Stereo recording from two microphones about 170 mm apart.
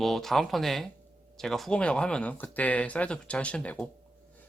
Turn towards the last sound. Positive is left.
turn(degrees=10)  # may be behind; listen again after turning